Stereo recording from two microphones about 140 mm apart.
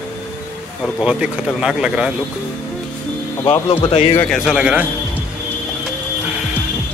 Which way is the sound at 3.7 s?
40° left (ahead or behind).